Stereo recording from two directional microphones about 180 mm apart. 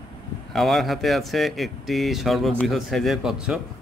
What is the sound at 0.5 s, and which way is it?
Speech, centre (ahead or behind).